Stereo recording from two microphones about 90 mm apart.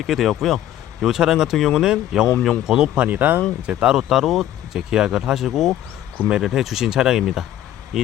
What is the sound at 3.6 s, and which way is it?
Speech, 10° right (ahead or behind).